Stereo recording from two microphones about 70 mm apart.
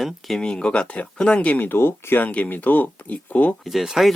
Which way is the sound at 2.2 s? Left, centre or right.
Left.